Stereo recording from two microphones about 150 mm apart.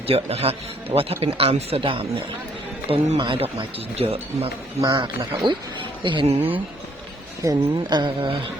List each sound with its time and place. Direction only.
0.1 s speech: 40° right (ahead or behind)
3.2 s speech: 35° right (ahead or behind)
4.8 s speech: 25° right (ahead or behind); by 6.6 s 40° right (ahead or behind)
7.4 s speech: 30° right (ahead or behind)